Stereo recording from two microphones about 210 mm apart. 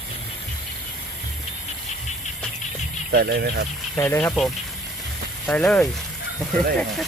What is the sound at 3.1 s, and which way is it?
Speech, 50° right (ahead or behind).